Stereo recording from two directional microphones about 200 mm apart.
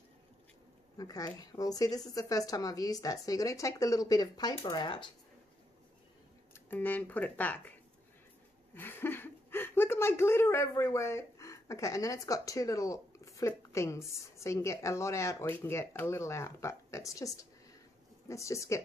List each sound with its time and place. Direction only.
0.9 s speech: 20° left (ahead or behind)
6.5 s speech: 10° left (ahead or behind)
8.7 s speech: 10° left (ahead or behind)